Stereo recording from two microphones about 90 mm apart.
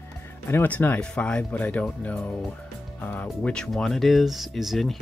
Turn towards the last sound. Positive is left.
turn(degrees=0)  # may be behind; listen again after turning